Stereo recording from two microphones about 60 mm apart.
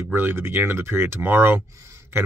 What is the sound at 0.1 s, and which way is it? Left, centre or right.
Speech, right.